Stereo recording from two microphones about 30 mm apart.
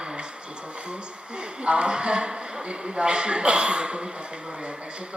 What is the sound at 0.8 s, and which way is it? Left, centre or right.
A woman's voice, right.